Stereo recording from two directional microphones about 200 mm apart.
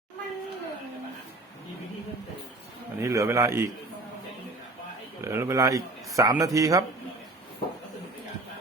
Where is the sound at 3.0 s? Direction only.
15° right (ahead or behind).